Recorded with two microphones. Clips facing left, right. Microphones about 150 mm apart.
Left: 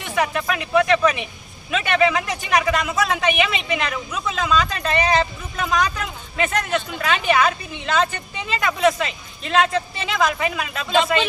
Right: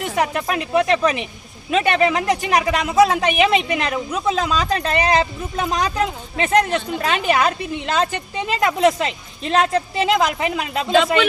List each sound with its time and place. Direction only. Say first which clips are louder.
0.0 s speech: right 2 dB; 35° right (ahead or behind)